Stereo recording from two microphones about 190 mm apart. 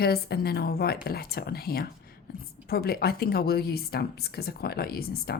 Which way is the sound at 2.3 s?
50° left (ahead or behind).